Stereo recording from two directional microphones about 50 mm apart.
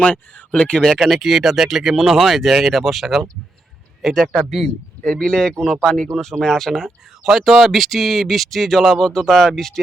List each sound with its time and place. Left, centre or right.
0.0 s speech: left
0.9 s speech: centre